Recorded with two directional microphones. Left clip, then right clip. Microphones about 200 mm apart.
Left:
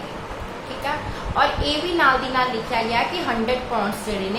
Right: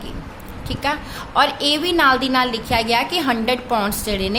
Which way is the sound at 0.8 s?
60° right (ahead or behind).